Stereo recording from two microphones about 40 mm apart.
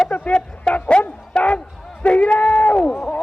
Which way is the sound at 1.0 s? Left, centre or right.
Left.